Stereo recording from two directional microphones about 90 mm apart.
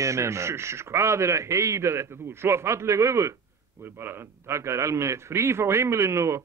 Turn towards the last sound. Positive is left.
turn(degrees=-35)  # may be behind; listen again after turning